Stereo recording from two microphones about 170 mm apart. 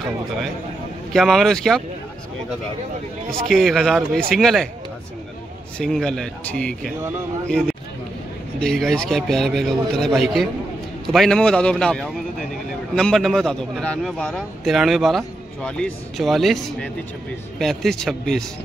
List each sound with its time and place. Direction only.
1.1 s a man's voice: centre (ahead or behind)
3.4 s a man's voice: centre (ahead or behind)
5.8 s a man's voice: 5° left (ahead or behind)